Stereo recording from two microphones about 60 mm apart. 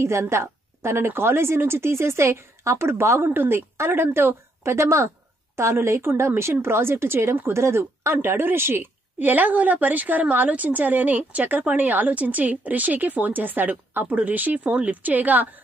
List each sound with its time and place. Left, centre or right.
0.0 s a woman's voice: right